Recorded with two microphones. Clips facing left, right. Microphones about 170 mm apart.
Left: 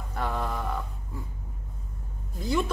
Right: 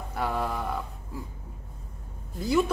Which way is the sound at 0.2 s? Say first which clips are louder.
Right 2 dB; 5° right (ahead or behind).